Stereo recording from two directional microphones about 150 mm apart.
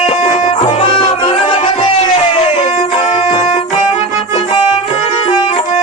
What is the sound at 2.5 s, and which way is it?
Music, 45° left (ahead or behind).